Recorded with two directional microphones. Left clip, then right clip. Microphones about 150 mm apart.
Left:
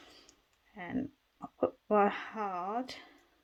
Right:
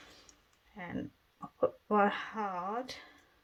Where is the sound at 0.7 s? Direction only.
55° left (ahead or behind).